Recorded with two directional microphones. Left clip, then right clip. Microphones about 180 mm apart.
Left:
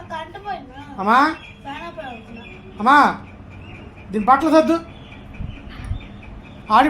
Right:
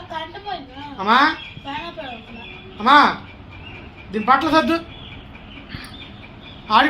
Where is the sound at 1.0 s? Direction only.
85° left.